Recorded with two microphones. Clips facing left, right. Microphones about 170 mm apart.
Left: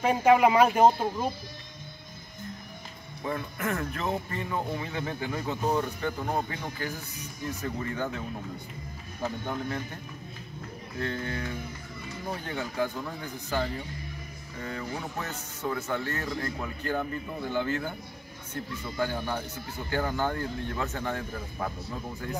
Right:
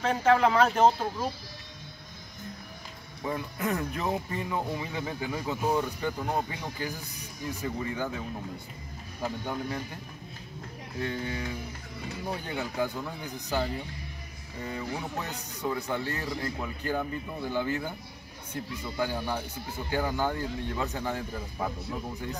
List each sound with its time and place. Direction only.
0.0 s speech: 15° left (ahead or behind)
3.3 s speech: 15° right (ahead or behind)
9.2 s speech: 10° right (ahead or behind)
11.0 s speech: 10° right (ahead or behind)
12.4 s speech: 10° right (ahead or behind)
14.6 s speech: 15° right (ahead or behind)